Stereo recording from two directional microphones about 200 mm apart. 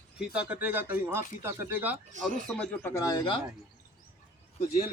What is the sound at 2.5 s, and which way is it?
Speech, 10° left (ahead or behind).